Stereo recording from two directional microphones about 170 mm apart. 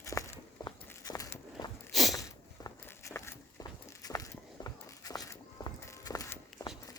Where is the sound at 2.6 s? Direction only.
15° left (ahead or behind).